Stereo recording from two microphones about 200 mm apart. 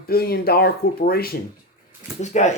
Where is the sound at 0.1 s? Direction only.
50° left (ahead or behind).